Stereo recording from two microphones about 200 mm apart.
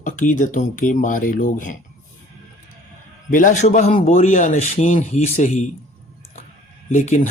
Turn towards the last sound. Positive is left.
turn(degrees=40)  # may be behind; listen again after turning